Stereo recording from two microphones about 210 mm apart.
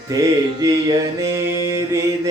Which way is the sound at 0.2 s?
15° right (ahead or behind).